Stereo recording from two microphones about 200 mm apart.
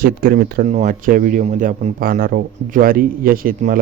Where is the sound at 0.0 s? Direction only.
45° right (ahead or behind).